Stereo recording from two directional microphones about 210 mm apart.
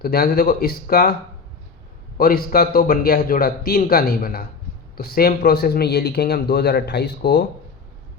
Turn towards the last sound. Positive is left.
turn(degrees=55)  # may be behind; listen again after turning